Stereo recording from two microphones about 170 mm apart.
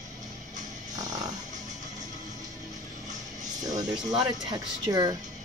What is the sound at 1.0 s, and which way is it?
Music, 20° right (ahead or behind).